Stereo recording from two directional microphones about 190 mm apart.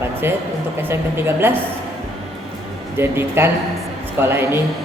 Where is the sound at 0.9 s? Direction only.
10° right (ahead or behind).